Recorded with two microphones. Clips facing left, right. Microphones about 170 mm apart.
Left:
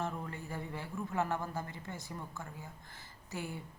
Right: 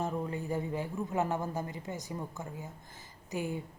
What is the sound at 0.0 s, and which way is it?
A man's voice, 15° right (ahead or behind).